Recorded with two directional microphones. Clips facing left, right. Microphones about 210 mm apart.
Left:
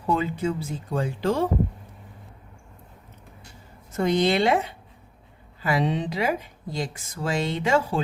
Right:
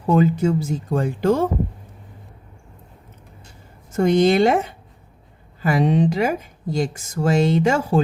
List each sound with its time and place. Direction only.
0.1 s speech: 45° right (ahead or behind)
3.9 s speech: 45° right (ahead or behind)